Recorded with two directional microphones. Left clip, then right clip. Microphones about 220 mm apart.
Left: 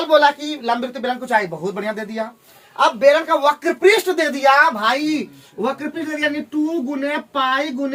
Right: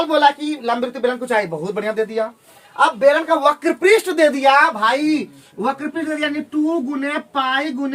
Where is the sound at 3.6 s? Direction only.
25° right (ahead or behind).